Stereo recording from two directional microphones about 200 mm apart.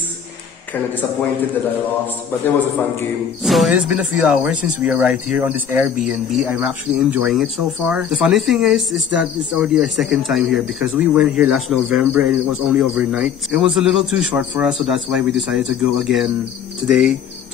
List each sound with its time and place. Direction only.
3.4 s speech: centre (ahead or behind)